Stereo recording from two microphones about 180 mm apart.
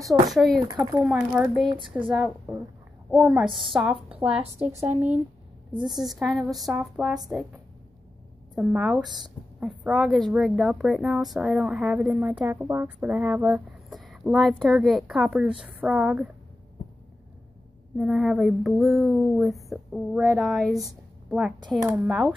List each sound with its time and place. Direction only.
0.0 s speech: centre (ahead or behind)
4.4 s a woman's voice: 35° right (ahead or behind)
4.7 s speech: 10° right (ahead or behind)
17.9 s a woman's voice: centre (ahead or behind)